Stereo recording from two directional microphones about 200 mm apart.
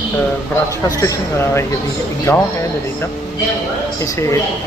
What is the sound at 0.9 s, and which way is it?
Speech, 15° left (ahead or behind).